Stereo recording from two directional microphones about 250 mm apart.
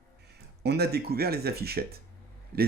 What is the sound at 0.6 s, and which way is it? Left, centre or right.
Speech, right.